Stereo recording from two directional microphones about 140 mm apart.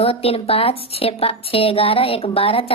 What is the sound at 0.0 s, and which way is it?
A woman's voice, 45° left (ahead or behind).